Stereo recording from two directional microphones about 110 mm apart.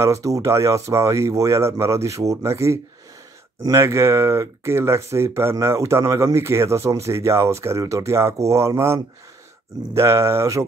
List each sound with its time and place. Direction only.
0.0 s speech: 25° right (ahead or behind)